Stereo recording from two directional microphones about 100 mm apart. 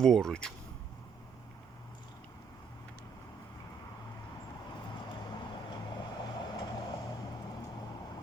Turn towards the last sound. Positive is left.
turn(degrees=45)  # may be behind; listen again after turning